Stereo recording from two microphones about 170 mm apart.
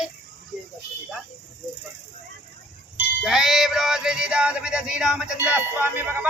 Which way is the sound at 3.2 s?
Centre (ahead or behind).